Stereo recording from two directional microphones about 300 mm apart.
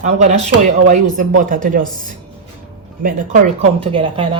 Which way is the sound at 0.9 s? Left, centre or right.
Right.